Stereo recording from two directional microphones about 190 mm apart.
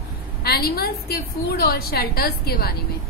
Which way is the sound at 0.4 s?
55° left (ahead or behind).